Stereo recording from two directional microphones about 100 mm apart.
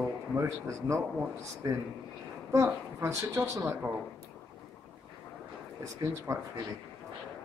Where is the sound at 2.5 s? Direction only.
30° right (ahead or behind).